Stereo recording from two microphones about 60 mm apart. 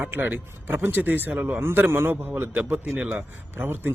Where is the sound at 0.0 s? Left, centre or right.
Right.